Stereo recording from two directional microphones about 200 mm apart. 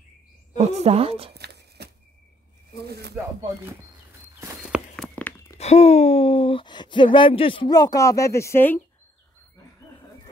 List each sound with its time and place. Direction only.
0.6 s a woman's voice: 30° right (ahead or behind)
1.3 s a sound: 55° right (ahead or behind)
2.9 s speech: 55° right (ahead or behind)
4.4 s walk: 15° right (ahead or behind)
4.9 s a sound: 5° left (ahead or behind)
5.6 s speech: 30° left (ahead or behind); by 8.8 s 10° left (ahead or behind)